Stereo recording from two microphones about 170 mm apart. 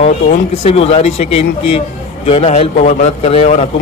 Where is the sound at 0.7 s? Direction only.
35° left (ahead or behind).